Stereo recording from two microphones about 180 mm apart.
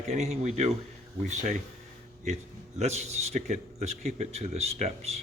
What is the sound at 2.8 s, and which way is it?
Speech, 40° right (ahead or behind).